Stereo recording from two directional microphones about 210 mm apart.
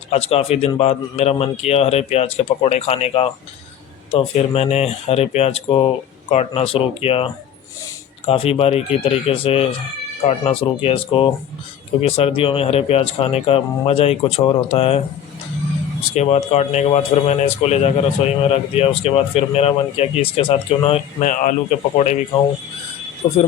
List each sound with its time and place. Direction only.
0.1 s a man's voice: 30° left (ahead or behind)
8.3 s a man's voice: 25° left (ahead or behind)
16.1 s a man's voice: 30° left (ahead or behind)
23.2 s a man's voice: 25° left (ahead or behind)